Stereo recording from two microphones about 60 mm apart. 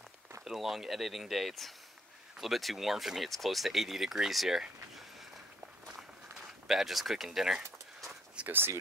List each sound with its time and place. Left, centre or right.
0.5 s speech: centre
5.9 s a sound: centre
8.5 s speech: right